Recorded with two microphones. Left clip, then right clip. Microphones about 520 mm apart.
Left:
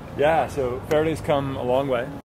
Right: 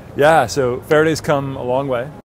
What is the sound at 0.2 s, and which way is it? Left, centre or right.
Speech, right.